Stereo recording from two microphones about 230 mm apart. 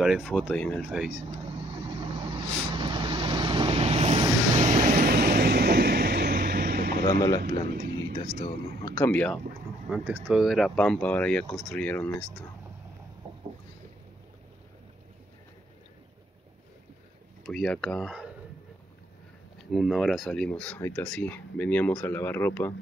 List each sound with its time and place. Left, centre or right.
0.0 s speech: centre
0.8 s speech: centre
2.0 s vehicle: right
7.1 s speech: centre
7.7 s speech: right
8.4 s speech: centre
9.8 s speech: centre
17.5 s speech: centre
19.6 s speech: centre